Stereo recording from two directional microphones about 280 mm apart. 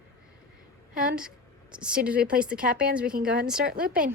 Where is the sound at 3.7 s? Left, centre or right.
Right.